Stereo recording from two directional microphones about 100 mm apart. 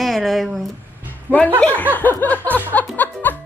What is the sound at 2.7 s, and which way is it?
Music, 15° left (ahead or behind).